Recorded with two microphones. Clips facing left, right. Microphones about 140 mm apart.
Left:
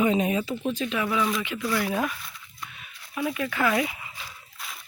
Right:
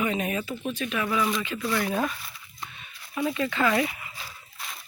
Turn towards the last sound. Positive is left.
turn(degrees=0)  # may be behind; listen again after turning